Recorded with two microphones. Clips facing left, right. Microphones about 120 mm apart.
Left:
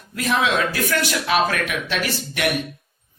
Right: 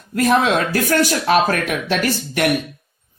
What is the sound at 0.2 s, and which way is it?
Speech, 45° right (ahead or behind).